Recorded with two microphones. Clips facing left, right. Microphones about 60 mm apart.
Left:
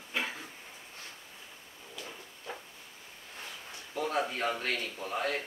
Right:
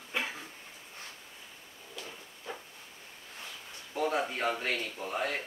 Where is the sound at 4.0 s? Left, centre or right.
Centre.